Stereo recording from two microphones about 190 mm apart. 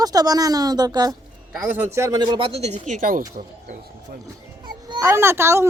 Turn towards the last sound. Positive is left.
turn(degrees=-15)  # may be behind; listen again after turning